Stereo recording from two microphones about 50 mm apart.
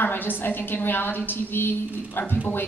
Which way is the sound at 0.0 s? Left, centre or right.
Left.